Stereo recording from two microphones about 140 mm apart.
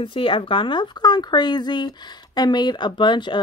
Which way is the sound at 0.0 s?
40° left (ahead or behind).